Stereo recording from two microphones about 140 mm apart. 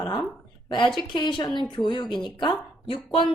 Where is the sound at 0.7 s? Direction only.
35° left (ahead or behind).